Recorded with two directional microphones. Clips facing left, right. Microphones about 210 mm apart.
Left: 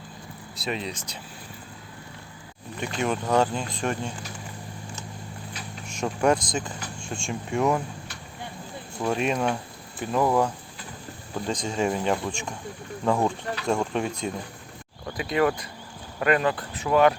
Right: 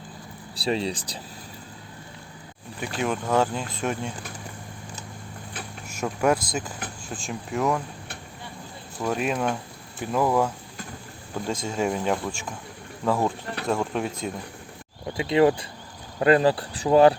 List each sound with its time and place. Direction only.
0.5 s speech: 30° right (ahead or behind)
2.8 s speech: 5° right (ahead or behind)
5.9 s speech: 5° right (ahead or behind)
9.0 s speech: 5° right (ahead or behind)
11.6 s speech: 5° right (ahead or behind)
15.0 s speech: 25° right (ahead or behind)